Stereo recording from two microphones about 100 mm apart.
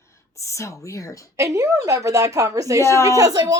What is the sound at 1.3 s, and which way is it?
Speech, 30° right (ahead or behind).